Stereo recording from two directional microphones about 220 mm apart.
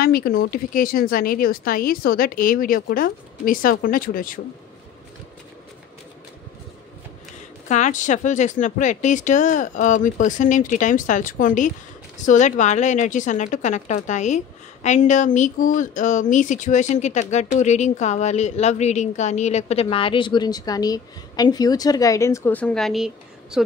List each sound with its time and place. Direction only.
0.0 s a woman's voice: 40° left (ahead or behind)
7.6 s a woman's voice: 35° left (ahead or behind); by 23.6 s centre (ahead or behind)